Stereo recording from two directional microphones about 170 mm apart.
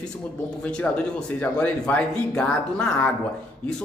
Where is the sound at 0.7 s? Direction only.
5° left (ahead or behind).